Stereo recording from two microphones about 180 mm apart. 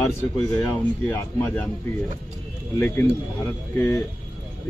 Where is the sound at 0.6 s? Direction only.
15° left (ahead or behind).